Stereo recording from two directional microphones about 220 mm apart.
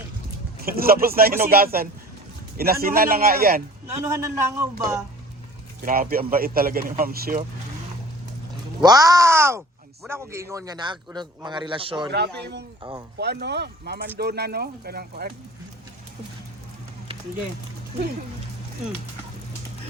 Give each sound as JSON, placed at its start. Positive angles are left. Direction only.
{"t": 0.6, "sound": "a man's voice", "side_deg": -40}
{"t": 4.0, "sound": "speech", "side_deg": -15}
{"t": 5.8, "sound": "speech", "side_deg": -40}
{"t": 8.8, "sound": "a man's voice", "side_deg": -15}
{"t": 13.1, "sound": "a man's voice", "side_deg": -50}